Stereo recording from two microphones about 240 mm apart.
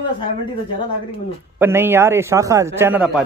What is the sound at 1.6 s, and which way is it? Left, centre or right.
Speech, centre.